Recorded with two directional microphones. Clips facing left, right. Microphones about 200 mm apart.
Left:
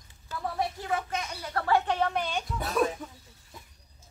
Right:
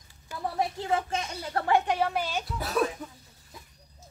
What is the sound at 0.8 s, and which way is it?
Speech, 25° right (ahead or behind).